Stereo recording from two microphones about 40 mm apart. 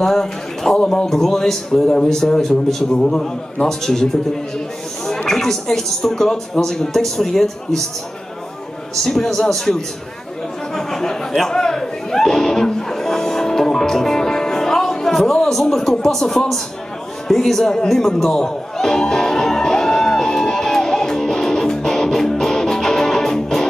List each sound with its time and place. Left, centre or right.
0.0 s a man's voice: centre
9.0 s a man's voice: centre
10.7 s a sound: centre
17.3 s a man's voice: centre
18.3 s music: centre